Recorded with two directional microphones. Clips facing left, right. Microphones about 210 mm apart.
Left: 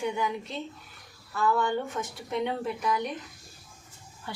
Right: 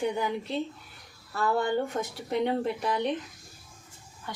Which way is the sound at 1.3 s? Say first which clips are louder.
Even; 40° right (ahead or behind).